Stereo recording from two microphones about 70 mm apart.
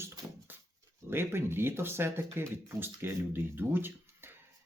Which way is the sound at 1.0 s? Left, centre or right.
Right.